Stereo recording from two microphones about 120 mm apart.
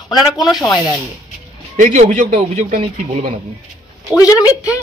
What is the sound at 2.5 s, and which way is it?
Speech, 70° right (ahead or behind).